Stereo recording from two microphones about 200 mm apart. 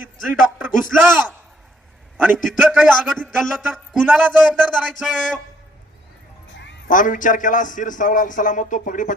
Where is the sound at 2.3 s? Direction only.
Centre (ahead or behind).